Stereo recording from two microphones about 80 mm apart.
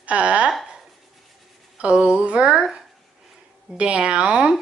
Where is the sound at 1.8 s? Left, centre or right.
Centre.